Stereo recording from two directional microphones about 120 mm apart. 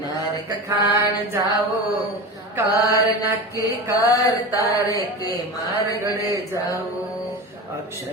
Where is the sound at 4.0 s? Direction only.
30° left (ahead or behind).